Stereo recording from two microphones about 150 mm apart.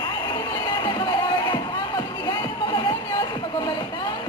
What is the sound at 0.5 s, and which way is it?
Music, 30° left (ahead or behind).